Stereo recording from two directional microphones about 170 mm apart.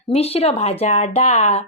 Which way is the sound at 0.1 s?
35° left (ahead or behind).